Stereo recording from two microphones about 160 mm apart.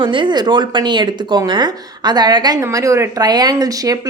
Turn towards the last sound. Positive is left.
turn(degrees=-20)  # may be behind; listen again after turning